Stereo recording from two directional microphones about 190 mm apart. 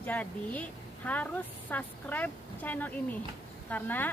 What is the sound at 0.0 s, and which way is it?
Speech, 10° left (ahead or behind).